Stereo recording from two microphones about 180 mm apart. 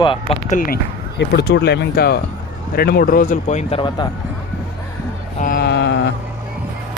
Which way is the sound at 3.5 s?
35° left (ahead or behind).